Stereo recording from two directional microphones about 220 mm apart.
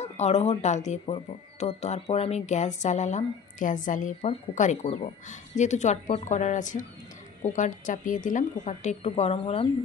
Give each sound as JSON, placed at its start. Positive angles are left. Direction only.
{"t": 0.0, "sound": "speech", "side_deg": 30}